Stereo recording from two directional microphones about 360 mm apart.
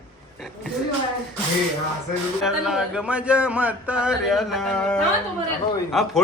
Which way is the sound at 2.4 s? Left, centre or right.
Centre.